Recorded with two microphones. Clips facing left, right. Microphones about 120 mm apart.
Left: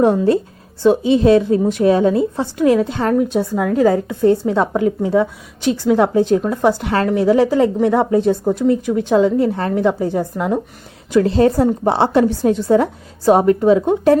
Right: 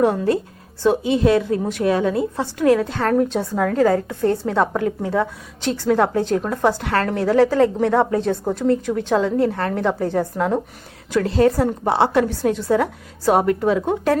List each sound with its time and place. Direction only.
0.0 s a woman's voice: 25° left (ahead or behind)
11.1 s a woman's voice: 25° left (ahead or behind)